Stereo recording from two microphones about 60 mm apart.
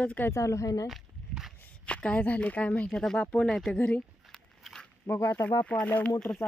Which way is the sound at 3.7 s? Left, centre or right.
Left.